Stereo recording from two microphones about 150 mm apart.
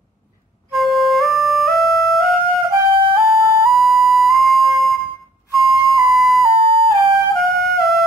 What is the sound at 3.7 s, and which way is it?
Flute, centre (ahead or behind).